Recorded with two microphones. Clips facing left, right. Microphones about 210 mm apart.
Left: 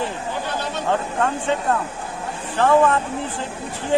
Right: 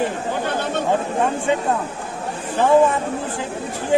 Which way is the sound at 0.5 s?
55° right (ahead or behind).